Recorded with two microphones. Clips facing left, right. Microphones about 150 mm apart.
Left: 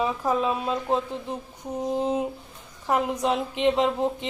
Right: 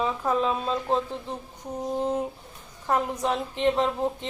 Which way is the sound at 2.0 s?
15° left (ahead or behind).